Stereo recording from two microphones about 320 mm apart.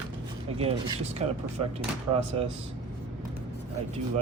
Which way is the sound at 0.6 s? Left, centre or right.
Centre.